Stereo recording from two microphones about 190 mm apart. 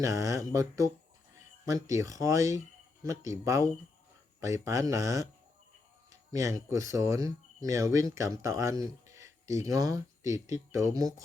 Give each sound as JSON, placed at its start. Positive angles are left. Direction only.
{"t": 0.0, "sound": "speech", "side_deg": -15}
{"t": 6.3, "sound": "speech", "side_deg": -15}